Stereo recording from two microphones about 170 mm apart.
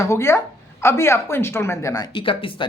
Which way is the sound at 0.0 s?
15° left (ahead or behind).